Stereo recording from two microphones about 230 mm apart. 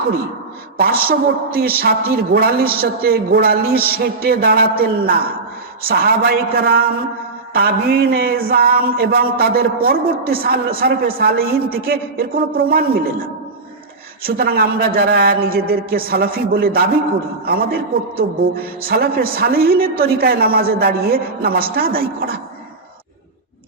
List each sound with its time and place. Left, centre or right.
0.8 s a woman's voice: right
14.3 s a woman's voice: right